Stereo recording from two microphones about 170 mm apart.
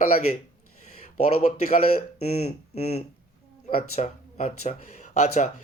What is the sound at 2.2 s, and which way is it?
Speech, 40° left (ahead or behind).